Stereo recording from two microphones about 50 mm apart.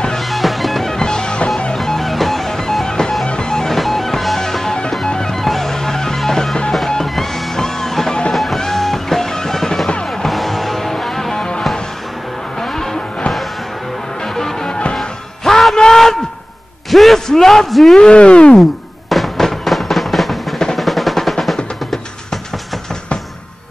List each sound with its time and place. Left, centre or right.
0.2 s music: centre
1.8 s music: centre
7.1 s music: centre
14.2 s music: centre
15.0 s music: centre
16.9 s a sound: centre
17.9 s speech: centre
18.6 s music: centre